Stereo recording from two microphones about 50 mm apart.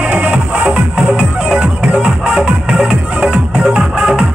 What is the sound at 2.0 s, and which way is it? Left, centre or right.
Music, centre.